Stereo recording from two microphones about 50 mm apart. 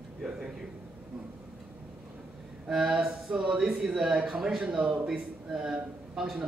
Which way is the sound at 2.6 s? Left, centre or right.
Centre.